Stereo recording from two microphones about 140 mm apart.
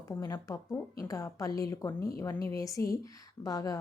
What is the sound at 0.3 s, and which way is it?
Speech, 20° left (ahead or behind).